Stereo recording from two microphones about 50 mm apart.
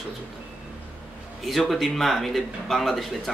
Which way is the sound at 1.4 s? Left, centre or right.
Centre.